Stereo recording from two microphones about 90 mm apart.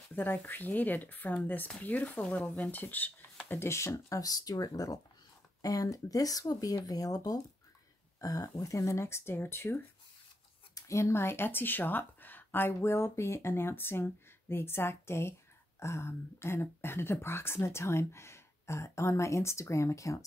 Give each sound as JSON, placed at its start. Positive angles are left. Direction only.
{"t": 0.1, "sound": "speech", "side_deg": 20}